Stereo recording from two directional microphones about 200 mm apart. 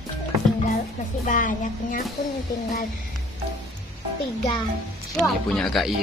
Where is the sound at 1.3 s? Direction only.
40° left (ahead or behind).